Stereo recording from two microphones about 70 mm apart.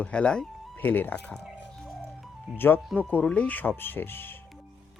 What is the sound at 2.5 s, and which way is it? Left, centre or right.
Speech, left.